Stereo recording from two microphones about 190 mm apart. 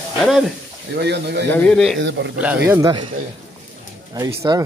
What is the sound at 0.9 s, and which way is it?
Speech, 60° right (ahead or behind).